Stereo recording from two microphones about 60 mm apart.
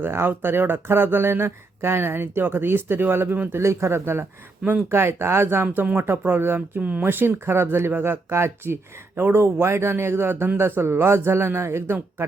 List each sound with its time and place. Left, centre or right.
0.0 s speech: right
3.5 s speech: right
5.7 s speech: right
6.0 s speech: right
6.8 s speech: right
7.1 s speech: right